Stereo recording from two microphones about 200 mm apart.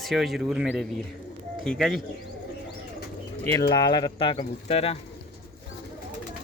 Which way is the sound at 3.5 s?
20° left (ahead or behind).